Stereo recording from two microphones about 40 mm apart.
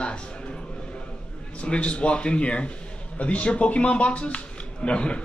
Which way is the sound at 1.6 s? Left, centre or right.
Left.